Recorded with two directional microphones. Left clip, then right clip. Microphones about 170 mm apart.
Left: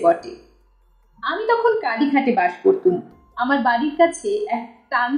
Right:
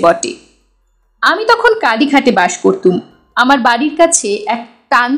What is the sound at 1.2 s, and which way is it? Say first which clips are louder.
A woman's voice: right 9 dB; 45° right (ahead or behind).